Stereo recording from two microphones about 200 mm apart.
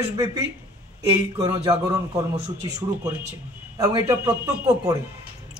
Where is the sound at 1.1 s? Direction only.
20° right (ahead or behind).